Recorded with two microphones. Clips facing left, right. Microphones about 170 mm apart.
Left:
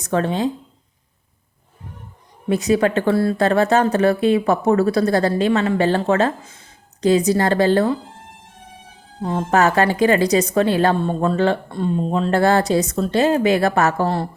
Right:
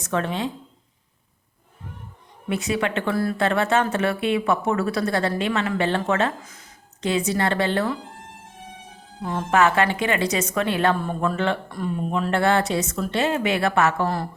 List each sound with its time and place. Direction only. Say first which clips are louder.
0.0 s speech: left 5 dB; 35° left (ahead or behind)
2.5 s speech: left 7 dB; 40° left (ahead or behind)
9.2 s speech: left 3 dB; 30° left (ahead or behind)